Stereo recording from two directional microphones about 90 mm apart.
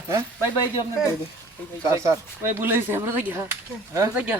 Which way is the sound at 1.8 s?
35° right (ahead or behind).